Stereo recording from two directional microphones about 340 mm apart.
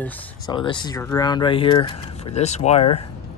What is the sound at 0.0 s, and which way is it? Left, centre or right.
Speech, centre.